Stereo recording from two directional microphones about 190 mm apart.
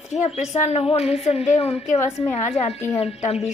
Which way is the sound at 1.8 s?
15° left (ahead or behind).